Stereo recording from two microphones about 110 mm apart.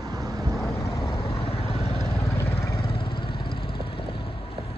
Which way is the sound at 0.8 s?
30° left (ahead or behind).